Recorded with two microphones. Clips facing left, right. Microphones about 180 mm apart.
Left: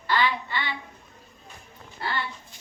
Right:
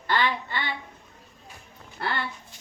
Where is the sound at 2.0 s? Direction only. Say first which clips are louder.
Right 2 dB; 60° right (ahead or behind).